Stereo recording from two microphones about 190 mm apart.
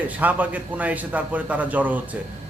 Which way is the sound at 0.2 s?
10° right (ahead or behind).